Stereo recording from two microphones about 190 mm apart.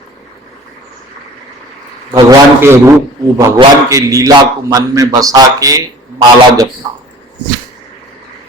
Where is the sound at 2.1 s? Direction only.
15° right (ahead or behind).